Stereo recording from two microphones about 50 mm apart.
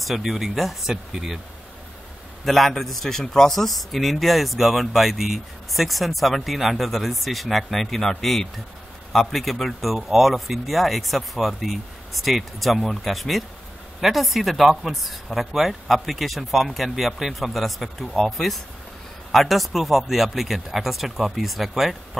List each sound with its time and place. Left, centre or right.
0.0 s a man's voice: centre
2.4 s a man's voice: centre